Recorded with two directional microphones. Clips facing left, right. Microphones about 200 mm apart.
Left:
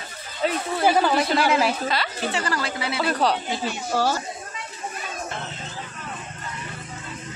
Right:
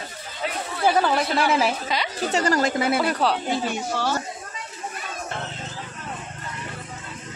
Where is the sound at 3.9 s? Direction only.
40° left (ahead or behind).